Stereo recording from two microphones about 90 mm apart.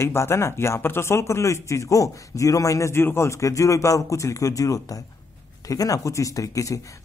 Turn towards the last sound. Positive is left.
turn(degrees=40)  # may be behind; listen again after turning